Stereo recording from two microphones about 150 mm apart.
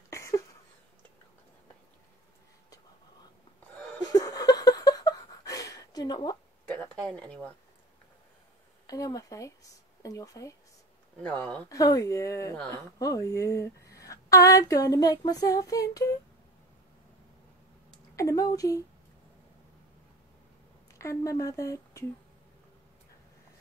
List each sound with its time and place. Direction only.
0.1 s a sound: 20° left (ahead or behind)
4.1 s a sound: 25° left (ahead or behind)
6.8 s speech: 5° left (ahead or behind)
8.8 s speech: 25° left (ahead or behind)
11.1 s speech: 5° left (ahead or behind)
11.7 s speech: 25° left (ahead or behind)
18.1 s speech: 20° left (ahead or behind)
21.0 s speech: 20° left (ahead or behind)